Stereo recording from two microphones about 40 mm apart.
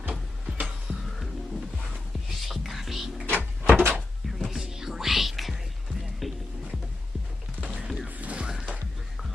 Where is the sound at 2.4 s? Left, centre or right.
Centre.